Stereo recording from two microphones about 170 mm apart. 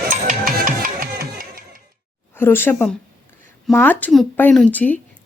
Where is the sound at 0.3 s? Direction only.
55° right (ahead or behind).